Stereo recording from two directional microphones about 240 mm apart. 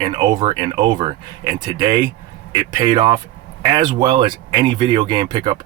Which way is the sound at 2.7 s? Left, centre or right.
Centre.